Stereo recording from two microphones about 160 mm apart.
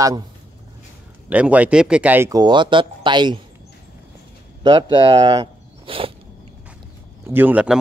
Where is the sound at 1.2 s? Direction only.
10° right (ahead or behind); by 3.4 s 30° right (ahead or behind).